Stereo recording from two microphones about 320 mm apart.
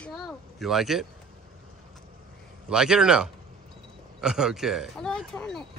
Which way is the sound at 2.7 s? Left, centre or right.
Centre.